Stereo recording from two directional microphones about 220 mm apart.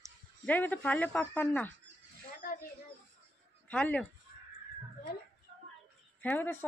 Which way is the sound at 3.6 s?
5° left (ahead or behind).